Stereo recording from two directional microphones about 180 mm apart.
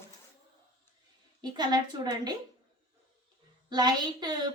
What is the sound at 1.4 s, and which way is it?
Speech, 25° right (ahead or behind).